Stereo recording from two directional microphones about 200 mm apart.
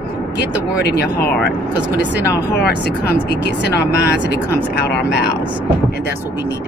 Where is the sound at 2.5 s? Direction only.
55° left (ahead or behind).